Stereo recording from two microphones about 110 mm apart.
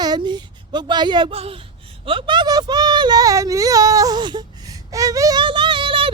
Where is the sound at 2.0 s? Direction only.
50° right (ahead or behind); by 5.4 s 30° right (ahead or behind).